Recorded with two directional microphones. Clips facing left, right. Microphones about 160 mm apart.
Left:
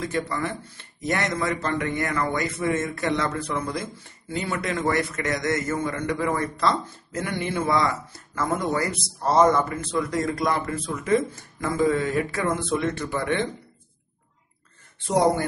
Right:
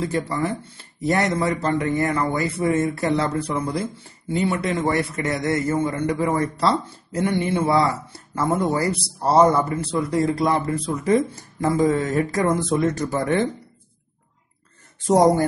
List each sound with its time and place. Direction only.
0.0 s a man's voice: 30° right (ahead or behind)
15.0 s a man's voice: 40° right (ahead or behind)